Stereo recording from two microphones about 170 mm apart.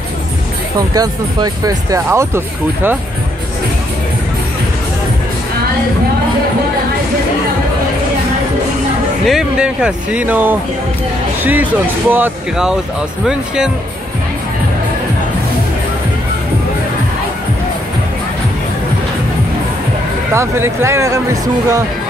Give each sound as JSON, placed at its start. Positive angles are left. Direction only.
{"t": 0.7, "sound": "speech", "side_deg": -20}
{"t": 9.2, "sound": "speech", "side_deg": 0}
{"t": 20.3, "sound": "speech", "side_deg": -15}